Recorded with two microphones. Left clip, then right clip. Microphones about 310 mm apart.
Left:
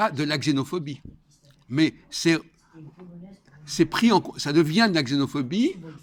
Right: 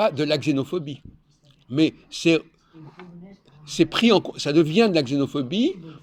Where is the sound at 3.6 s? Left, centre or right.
Left.